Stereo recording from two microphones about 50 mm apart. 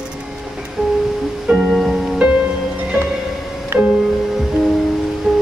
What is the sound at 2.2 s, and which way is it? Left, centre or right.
Music, centre.